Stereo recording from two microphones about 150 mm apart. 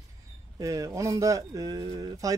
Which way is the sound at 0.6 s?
20° right (ahead or behind).